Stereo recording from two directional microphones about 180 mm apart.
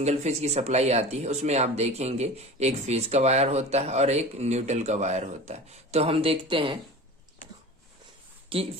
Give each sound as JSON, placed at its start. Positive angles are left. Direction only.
{"t": 0.0, "sound": "speech", "side_deg": -40}
{"t": 8.5, "sound": "speech", "side_deg": -30}